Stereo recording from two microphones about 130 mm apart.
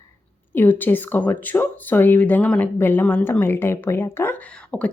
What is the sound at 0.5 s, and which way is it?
Speech, 15° left (ahead or behind).